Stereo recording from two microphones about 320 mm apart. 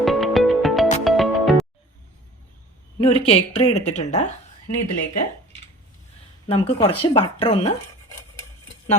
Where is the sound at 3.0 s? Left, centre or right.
Centre.